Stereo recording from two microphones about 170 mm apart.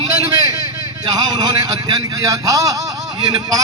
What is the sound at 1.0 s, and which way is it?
A man's voice, 20° right (ahead or behind).